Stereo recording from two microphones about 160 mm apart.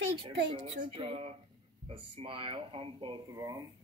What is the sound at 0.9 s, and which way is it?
Speech, 35° right (ahead or behind).